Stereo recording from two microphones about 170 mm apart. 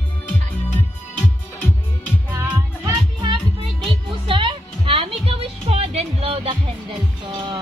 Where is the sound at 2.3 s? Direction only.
10° right (ahead or behind).